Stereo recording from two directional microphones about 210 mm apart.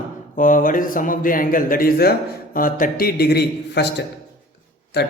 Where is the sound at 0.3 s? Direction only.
40° left (ahead or behind).